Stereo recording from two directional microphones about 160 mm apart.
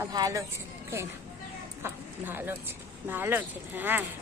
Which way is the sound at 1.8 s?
15° right (ahead or behind).